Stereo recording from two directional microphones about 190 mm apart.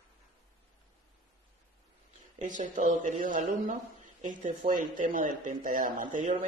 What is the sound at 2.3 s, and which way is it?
Speech, 40° right (ahead or behind).